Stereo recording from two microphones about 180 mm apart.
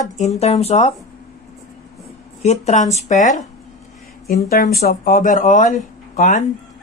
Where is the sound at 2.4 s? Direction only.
40° left (ahead or behind).